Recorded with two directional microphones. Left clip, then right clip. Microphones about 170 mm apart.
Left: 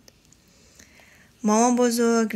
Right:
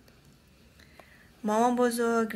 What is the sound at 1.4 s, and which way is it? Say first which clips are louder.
Speech: left 5 dB; 20° left (ahead or behind).